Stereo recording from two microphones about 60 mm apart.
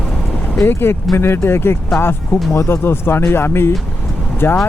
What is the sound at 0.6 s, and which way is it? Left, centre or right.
Speech, left.